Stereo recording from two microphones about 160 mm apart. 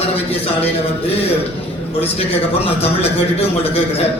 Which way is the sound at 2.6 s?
40° left (ahead or behind).